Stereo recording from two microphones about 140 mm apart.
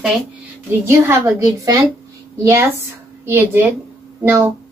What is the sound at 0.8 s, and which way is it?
Speech, 20° right (ahead or behind).